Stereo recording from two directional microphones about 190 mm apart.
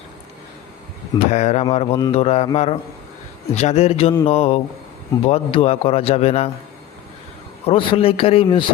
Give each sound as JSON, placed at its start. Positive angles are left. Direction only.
{"t": 1.3, "sound": "a man's voice", "side_deg": 35}
{"t": 7.7, "sound": "a man's voice", "side_deg": 30}